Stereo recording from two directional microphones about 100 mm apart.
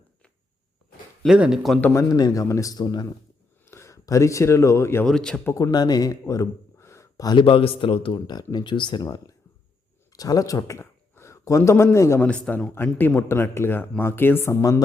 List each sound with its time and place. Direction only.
1.4 s speech: 5° right (ahead or behind)
1.9 s a man's voice: 35° left (ahead or behind)
3.7 s speech: 30° left (ahead or behind)
5.0 s speech: 5° left (ahead or behind)
5.5 s speech: 25° left (ahead or behind)
5.7 s speech: 45° left (ahead or behind)
7.3 s speech: 60° left (ahead or behind)
8.5 s speech: 50° left (ahead or behind); by 12.3 s 25° left (ahead or behind)
12.3 s speech: 15° left (ahead or behind); by 14.8 s 30° left (ahead or behind)